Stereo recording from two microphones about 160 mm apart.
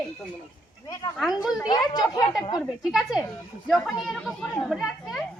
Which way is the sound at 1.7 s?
25° left (ahead or behind).